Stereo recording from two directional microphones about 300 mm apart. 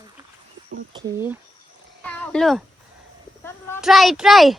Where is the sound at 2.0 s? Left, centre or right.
Centre.